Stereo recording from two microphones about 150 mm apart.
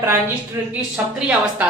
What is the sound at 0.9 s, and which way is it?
Speech, 5° right (ahead or behind).